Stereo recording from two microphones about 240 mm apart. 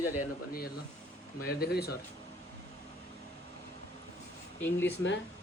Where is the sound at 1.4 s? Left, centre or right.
Left.